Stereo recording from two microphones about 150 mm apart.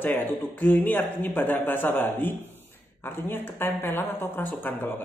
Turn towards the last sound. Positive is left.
turn(degrees=10)  # may be behind; listen again after turning